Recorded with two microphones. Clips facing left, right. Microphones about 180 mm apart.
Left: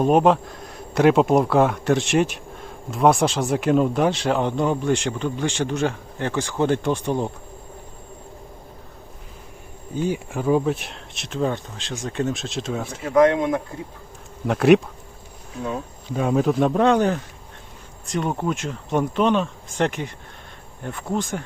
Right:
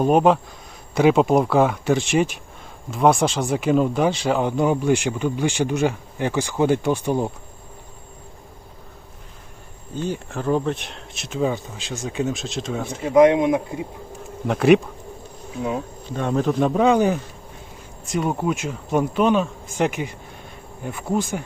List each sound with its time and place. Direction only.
0.0 s speech: centre (ahead or behind)
9.9 s speech: 10° left (ahead or behind)
13.1 s speech: 15° right (ahead or behind)
14.4 s speech: centre (ahead or behind)
16.1 s speech: 5° left (ahead or behind)